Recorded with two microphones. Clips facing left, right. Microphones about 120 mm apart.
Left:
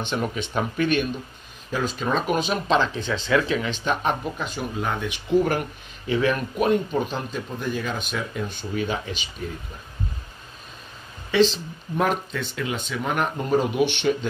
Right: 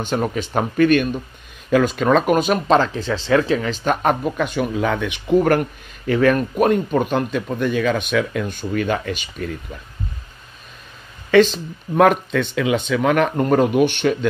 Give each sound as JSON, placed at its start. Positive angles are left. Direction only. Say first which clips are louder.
{"t": 0.0, "sound": "speech", "louder": "right 5 dB", "side_deg": -45}
{"t": 1.7, "sound": "speech", "louder": "right 9 dB", "side_deg": -75}
{"t": 5.3, "sound": "speech", "louder": "right 5 dB", "side_deg": -60}
{"t": 8.5, "sound": "speech", "louder": "right 6 dB", "side_deg": -55}
{"t": 11.2, "sound": "speech", "louder": "right 6 dB", "side_deg": -55}
{"t": 11.9, "sound": "speech", "louder": "right 9 dB", "side_deg": -80}